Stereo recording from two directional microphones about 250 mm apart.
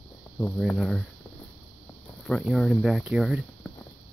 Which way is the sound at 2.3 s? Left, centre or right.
Centre.